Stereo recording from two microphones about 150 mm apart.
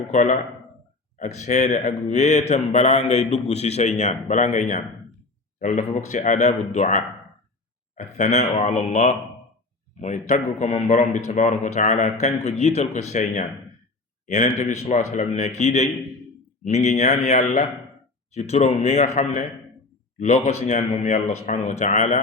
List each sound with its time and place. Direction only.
0.1 s speech: 55° left (ahead or behind)